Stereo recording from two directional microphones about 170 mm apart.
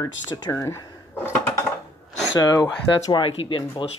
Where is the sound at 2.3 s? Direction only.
20° left (ahead or behind).